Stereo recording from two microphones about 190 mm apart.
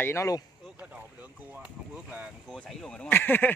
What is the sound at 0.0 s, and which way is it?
Speech, 15° left (ahead or behind).